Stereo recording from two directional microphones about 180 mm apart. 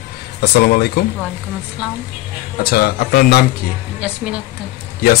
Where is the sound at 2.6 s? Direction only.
60° left (ahead or behind).